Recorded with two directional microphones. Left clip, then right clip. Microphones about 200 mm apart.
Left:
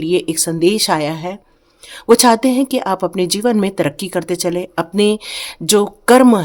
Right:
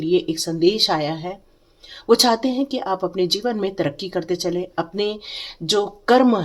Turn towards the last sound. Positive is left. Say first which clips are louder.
# left 6 dB
turn(degrees=45)  # may be behind; listen again after turning